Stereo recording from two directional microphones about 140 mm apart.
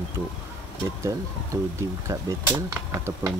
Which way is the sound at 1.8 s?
20° right (ahead or behind).